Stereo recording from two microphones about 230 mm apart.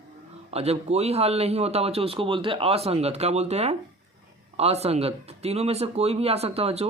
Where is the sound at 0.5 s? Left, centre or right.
Right.